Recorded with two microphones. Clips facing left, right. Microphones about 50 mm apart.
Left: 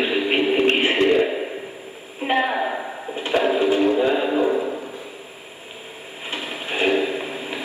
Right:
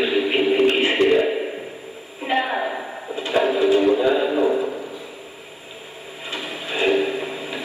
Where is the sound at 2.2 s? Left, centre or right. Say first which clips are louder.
Left 1 dB; left.